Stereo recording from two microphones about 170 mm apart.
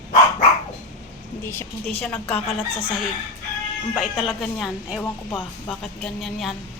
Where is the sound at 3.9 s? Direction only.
Centre (ahead or behind).